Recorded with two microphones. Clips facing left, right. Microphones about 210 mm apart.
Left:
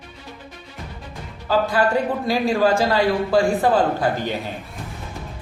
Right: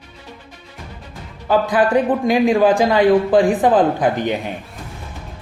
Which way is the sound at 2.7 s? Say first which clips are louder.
Right 5 dB; 15° right (ahead or behind).